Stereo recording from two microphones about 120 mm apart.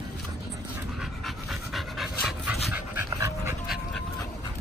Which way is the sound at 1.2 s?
Centre (ahead or behind).